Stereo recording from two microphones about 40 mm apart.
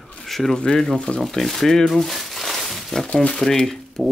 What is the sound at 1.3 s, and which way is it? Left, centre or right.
Speech, centre.